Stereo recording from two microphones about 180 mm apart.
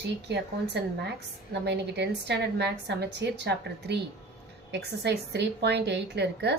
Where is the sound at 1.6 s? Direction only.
70° right (ahead or behind).